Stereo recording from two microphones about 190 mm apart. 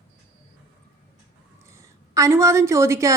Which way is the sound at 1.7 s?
15° right (ahead or behind).